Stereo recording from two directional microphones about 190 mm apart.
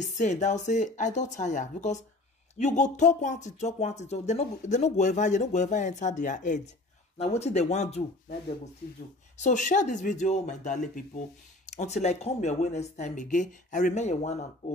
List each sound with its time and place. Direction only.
0.0 s speech: 40° left (ahead or behind)
9.4 s speech: 40° left (ahead or behind)